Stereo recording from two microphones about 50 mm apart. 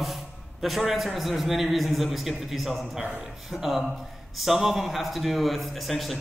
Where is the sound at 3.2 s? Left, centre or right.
Centre.